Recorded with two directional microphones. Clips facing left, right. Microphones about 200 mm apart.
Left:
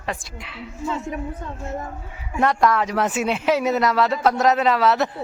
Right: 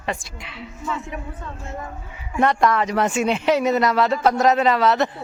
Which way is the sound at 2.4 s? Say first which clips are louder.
Even; centre (ahead or behind).